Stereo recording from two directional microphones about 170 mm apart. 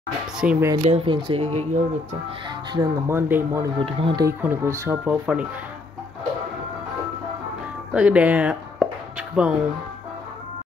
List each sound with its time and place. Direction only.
0.4 s speech: 5° right (ahead or behind)
0.8 s speech: 35° right (ahead or behind)
2.7 s speech: 20° right (ahead or behind)
3.8 s speech: 30° right (ahead or behind)
4.4 s speech: 15° right (ahead or behind)
7.9 s speech: 10° right (ahead or behind)